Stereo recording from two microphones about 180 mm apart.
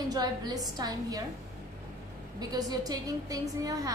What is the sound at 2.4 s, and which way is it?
A woman's voice, 20° right (ahead or behind).